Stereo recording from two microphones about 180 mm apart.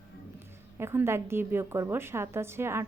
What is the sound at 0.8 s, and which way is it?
A woman's voice, 15° right (ahead or behind).